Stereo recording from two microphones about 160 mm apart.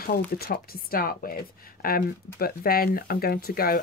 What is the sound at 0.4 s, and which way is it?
Speech, 70° left (ahead or behind).